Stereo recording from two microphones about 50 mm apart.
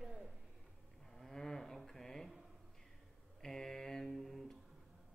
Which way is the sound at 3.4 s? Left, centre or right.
Centre.